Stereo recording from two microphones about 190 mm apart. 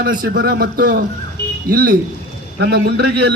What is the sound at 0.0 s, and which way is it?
A man's voice, 50° right (ahead or behind).